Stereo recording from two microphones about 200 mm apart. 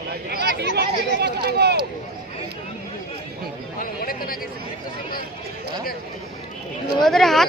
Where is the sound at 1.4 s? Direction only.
55° right (ahead or behind).